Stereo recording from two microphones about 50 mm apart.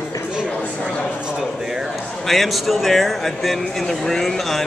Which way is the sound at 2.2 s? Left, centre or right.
Centre.